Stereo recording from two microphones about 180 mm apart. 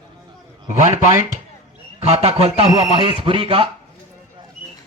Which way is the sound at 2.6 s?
20° right (ahead or behind).